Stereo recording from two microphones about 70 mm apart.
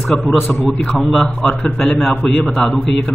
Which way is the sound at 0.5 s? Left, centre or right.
Centre.